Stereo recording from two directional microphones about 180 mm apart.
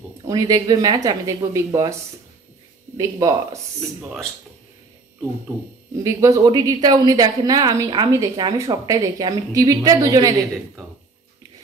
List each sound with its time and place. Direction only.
0.3 s a woman's voice: 20° right (ahead or behind)
3.0 s speech: 15° right (ahead or behind)
6.0 s a woman's voice: 20° right (ahead or behind)